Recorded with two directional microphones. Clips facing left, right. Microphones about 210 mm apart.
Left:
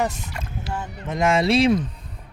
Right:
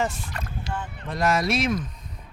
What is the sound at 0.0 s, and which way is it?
Speech, 20° left (ahead or behind).